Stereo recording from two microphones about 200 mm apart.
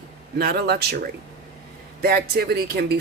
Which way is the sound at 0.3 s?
50° right (ahead or behind).